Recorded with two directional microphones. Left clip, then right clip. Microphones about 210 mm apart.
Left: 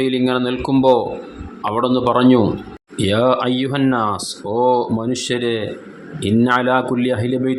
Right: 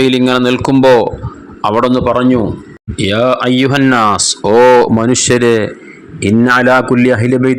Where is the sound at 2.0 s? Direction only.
10° right (ahead or behind).